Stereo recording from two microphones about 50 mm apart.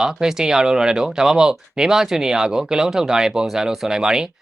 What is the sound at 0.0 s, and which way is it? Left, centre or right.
Speech, centre.